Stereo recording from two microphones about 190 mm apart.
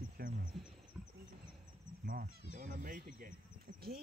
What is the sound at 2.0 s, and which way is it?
Speech, 50° right (ahead or behind).